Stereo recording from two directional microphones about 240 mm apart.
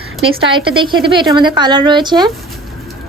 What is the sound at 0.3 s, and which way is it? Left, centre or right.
A woman's voice, right.